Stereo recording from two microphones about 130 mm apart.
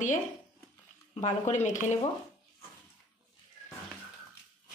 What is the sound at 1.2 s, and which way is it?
Speech, 65° left (ahead or behind).